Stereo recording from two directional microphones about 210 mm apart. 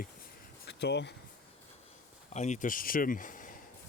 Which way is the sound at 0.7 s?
55° left (ahead or behind).